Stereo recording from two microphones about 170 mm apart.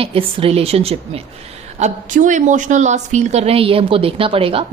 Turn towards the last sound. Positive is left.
turn(degrees=-35)  # may be behind; listen again after turning